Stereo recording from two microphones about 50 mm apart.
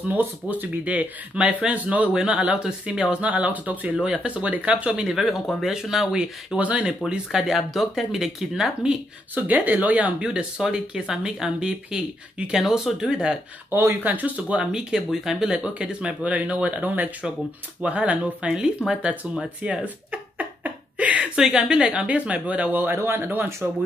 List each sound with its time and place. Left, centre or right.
0.1 s speech: right
0.8 s speech: right
5.0 s speech: centre
6.5 s speech: right
7.5 s speech: centre
9.3 s speech: right
10.1 s speech: centre
13.7 s speech: right
14.0 s speech: right
14.7 s speech: centre
18.5 s speech: centre
19.6 s a sound: right
21.4 s speech: centre
22.8 s speech: right